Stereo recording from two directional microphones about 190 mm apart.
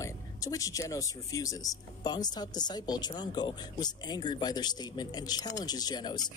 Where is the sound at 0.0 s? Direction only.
15° left (ahead or behind).